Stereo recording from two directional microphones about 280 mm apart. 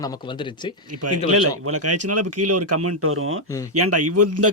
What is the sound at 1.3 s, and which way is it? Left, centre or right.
Speech, right.